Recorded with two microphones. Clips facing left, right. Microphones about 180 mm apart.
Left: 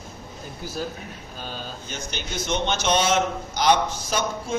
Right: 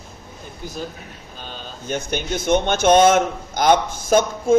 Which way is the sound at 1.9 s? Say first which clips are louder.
Right 13 dB; 55° right (ahead or behind).